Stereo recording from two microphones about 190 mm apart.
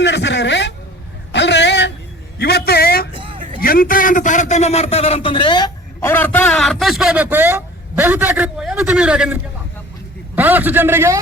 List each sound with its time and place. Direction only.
0.0 s a sound: 65° left (ahead or behind)
3.1 s vehicle: 25° right (ahead or behind)
3.6 s a man's voice: 50° left (ahead or behind); by 11.2 s 10° right (ahead or behind)